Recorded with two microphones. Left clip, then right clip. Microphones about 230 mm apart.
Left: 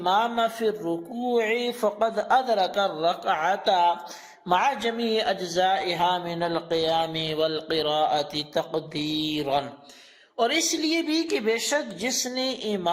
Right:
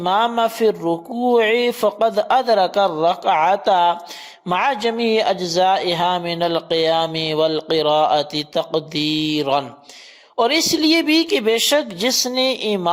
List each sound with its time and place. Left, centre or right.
0.0 s speech: right